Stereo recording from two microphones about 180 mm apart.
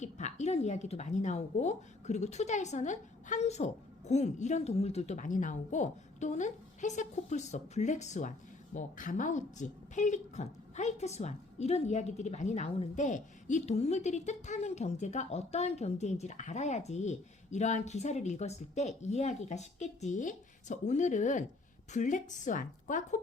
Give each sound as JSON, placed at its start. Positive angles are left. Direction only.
{"t": 0.0, "sound": "a woman's voice", "side_deg": 40}